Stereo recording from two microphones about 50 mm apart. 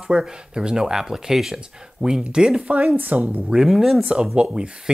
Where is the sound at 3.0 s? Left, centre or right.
Right.